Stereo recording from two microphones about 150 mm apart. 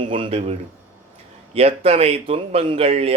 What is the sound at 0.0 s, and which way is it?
Speech, 35° right (ahead or behind).